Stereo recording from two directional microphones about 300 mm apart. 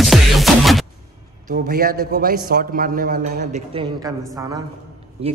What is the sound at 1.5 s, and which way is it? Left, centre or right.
A man's voice, right.